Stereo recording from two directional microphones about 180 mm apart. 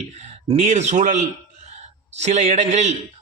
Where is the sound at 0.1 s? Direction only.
40° right (ahead or behind).